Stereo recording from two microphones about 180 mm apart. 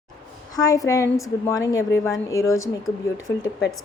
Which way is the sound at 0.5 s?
20° left (ahead or behind).